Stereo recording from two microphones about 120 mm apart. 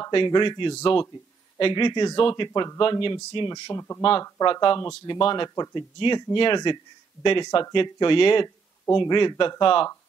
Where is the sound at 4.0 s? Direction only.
50° left (ahead or behind).